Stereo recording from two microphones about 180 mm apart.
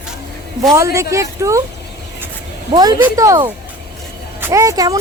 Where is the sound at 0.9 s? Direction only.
15° right (ahead or behind).